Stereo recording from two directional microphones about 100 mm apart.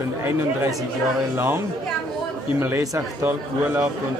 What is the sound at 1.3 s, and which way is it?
Speech, 20° right (ahead or behind).